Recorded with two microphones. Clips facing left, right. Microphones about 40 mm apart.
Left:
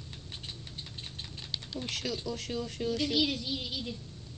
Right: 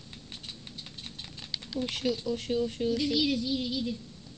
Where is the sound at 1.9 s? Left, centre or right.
Centre.